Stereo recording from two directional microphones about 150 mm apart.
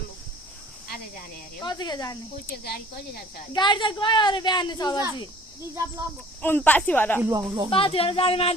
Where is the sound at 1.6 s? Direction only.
25° left (ahead or behind).